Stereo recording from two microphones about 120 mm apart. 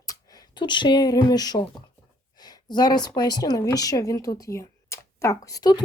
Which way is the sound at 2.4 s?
35° left (ahead or behind).